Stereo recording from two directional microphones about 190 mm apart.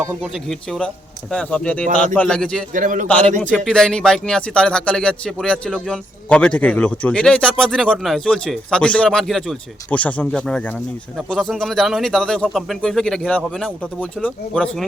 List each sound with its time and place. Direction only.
0.2 s speech: 5° left (ahead or behind)
2.7 s a man's voice: 45° right (ahead or behind)
3.1 s a man's voice: 5° left (ahead or behind)